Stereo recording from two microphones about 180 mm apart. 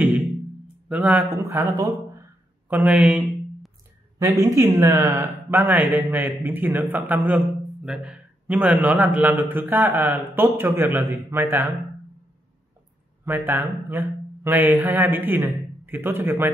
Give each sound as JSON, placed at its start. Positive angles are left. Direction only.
{"t": 0.8, "sound": "speech", "side_deg": -10}
{"t": 2.7, "sound": "a sound", "side_deg": -10}
{"t": 4.2, "sound": "speech", "side_deg": -20}
{"t": 13.2, "sound": "speech", "side_deg": -10}